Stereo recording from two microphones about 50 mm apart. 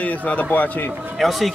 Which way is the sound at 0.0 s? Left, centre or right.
Left.